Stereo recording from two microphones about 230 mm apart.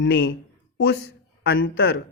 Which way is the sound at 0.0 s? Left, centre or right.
Left.